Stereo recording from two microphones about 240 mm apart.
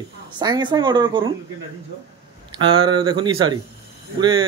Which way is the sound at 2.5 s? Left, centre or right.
Right.